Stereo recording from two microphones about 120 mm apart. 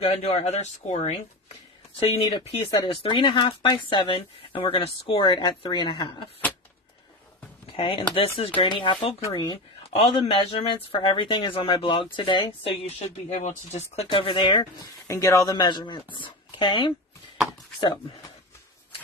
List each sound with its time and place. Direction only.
0.0 s speech: 55° left (ahead or behind)
2.0 s speech: 50° left (ahead or behind)
7.7 s speech: 50° left (ahead or behind)
12.8 s speech: 70° left (ahead or behind); by 14.9 s 40° left (ahead or behind)
15.0 s speech: 25° left (ahead or behind); by 16.9 s 45° left (ahead or behind)